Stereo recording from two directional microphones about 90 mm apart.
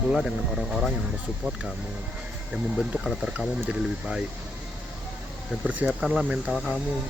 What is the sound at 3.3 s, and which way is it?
Speech, 10° right (ahead or behind).